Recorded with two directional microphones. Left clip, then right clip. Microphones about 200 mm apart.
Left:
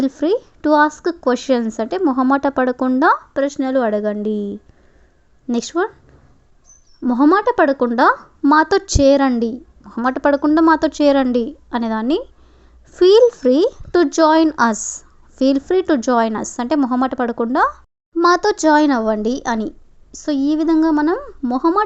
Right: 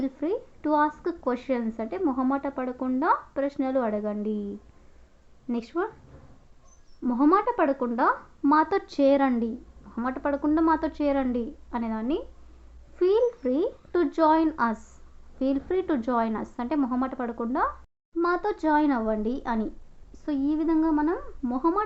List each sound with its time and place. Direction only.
0.0 s a woman's voice: 50° left (ahead or behind)
7.0 s a woman's voice: 40° left (ahead or behind)